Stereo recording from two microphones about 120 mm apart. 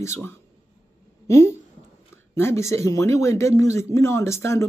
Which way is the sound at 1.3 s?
25° left (ahead or behind).